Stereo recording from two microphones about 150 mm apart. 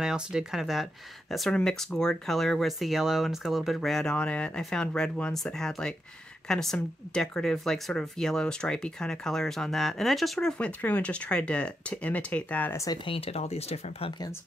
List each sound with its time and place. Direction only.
0.0 s speech: 5° right (ahead or behind); by 13.0 s 20° left (ahead or behind)
13.0 s speech: 40° left (ahead or behind)